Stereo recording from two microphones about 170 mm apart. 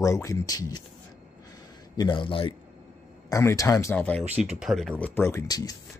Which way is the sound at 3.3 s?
20° left (ahead or behind).